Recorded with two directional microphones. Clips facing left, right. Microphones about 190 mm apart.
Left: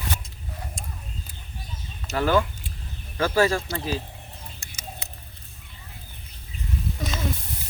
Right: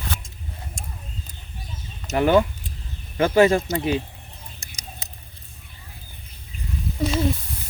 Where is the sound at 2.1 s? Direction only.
20° right (ahead or behind).